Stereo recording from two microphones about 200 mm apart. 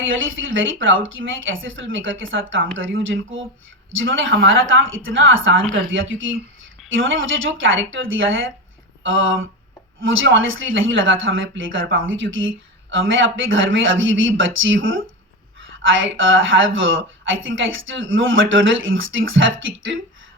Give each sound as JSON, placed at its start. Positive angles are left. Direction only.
{"t": 0.0, "sound": "speech", "side_deg": -75}